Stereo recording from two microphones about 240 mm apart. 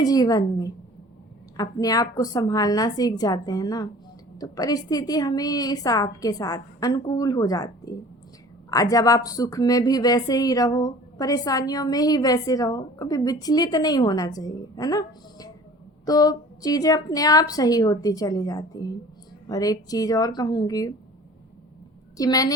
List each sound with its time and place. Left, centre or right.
0.0 s a woman's voice: centre
22.2 s a woman's voice: centre